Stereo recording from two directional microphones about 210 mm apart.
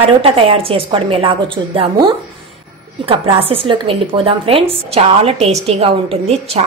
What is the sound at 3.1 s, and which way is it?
A woman's voice, 25° right (ahead or behind).